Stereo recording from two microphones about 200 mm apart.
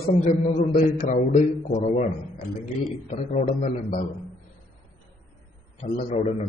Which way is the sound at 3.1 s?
30° left (ahead or behind).